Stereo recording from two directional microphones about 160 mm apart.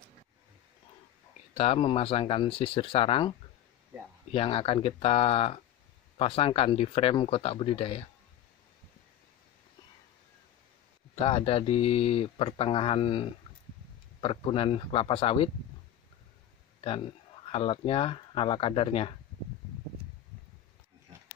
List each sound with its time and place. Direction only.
1.5 s speech: 40° left (ahead or behind)
11.1 s speech: 35° left (ahead or behind)
17.5 s speech: 35° left (ahead or behind)